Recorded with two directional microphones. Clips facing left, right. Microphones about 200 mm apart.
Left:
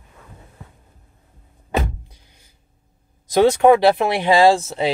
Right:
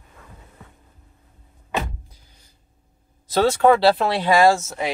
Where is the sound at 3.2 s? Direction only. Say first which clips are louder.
Left 3 dB; 15° left (ahead or behind).